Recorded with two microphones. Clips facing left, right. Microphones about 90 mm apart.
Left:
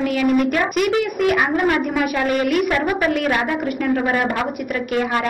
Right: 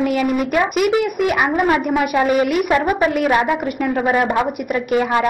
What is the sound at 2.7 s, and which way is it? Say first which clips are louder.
Speech: right 3 dB; 20° right (ahead or behind).